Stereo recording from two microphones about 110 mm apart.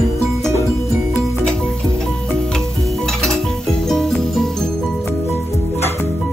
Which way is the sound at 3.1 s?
5° left (ahead or behind).